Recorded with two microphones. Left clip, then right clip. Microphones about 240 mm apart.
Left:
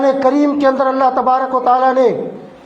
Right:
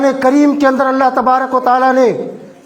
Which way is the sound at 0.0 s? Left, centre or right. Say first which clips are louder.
Right 2 dB; right.